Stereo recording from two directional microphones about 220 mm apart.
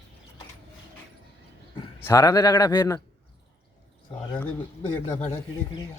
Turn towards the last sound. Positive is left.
turn(degrees=10)  # may be behind; listen again after turning